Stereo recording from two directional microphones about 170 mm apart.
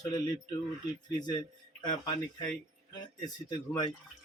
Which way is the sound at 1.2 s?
25° left (ahead or behind).